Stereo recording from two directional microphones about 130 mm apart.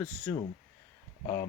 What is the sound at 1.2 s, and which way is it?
Speech, 25° left (ahead or behind).